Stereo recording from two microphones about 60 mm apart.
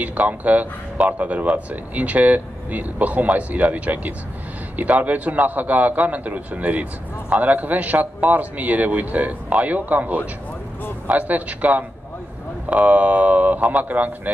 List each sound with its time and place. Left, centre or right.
0.0 s a man's voice: right